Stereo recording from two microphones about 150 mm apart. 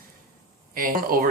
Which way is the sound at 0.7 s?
70° right (ahead or behind).